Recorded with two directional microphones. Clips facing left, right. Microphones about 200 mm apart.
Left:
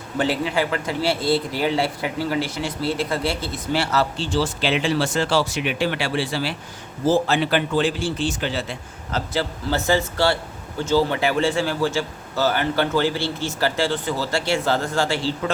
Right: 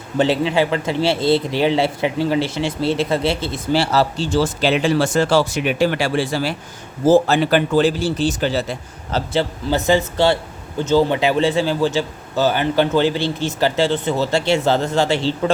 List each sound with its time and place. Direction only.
0.2 s a man's voice: 25° right (ahead or behind)
9.3 s a man's voice: 20° right (ahead or behind)